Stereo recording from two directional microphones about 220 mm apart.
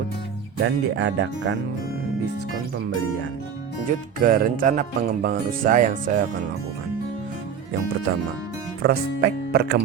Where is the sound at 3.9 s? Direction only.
40° right (ahead or behind).